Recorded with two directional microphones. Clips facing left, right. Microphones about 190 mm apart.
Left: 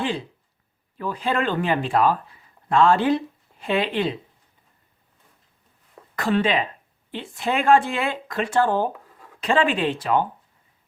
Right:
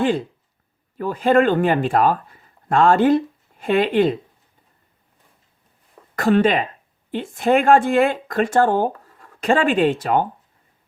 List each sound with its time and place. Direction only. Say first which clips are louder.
0.9 s speech: right 8 dB; 45° right (ahead or behind)
6.1 s speech: right 5 dB; 45° right (ahead or behind)